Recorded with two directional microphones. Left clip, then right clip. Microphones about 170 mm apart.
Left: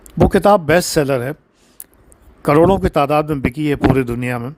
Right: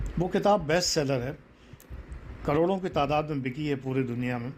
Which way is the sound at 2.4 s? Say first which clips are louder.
Left 14 dB; 60° left (ahead or behind).